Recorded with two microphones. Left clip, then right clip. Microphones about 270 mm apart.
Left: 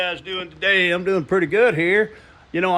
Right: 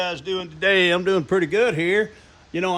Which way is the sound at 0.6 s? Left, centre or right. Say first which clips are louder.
Even; right.